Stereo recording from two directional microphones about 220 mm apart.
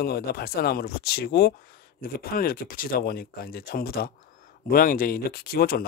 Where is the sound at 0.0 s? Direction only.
45° left (ahead or behind).